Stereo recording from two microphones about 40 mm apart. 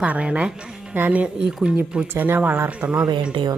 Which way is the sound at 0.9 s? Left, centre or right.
Right.